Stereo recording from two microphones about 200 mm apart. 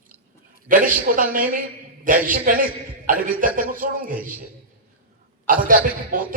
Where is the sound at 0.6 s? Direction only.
45° right (ahead or behind).